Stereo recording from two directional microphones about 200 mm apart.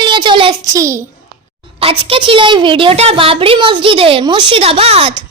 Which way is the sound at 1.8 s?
30° right (ahead or behind).